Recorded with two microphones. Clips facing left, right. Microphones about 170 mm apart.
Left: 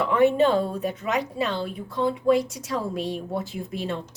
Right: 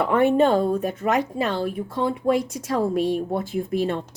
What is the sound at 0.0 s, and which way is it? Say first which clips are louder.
A woman's voice: right 1 dB; 55° right (ahead or behind).